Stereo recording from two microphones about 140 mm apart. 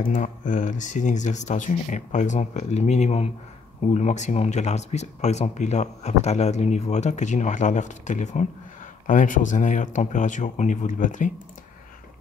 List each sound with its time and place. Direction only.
0.0 s speech: 70° left (ahead or behind)
9.0 s speech: 70° left (ahead or behind)